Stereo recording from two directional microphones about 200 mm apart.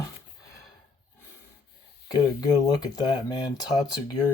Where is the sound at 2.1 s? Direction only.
20° left (ahead or behind).